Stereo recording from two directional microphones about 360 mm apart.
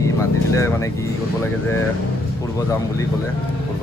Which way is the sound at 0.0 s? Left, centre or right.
Centre.